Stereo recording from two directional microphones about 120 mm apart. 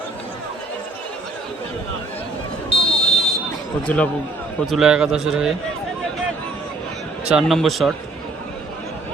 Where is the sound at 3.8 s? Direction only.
10° left (ahead or behind).